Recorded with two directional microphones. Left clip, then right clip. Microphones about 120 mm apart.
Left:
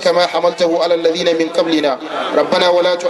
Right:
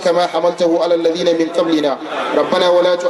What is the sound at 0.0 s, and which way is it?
A man's voice, 20° left (ahead or behind).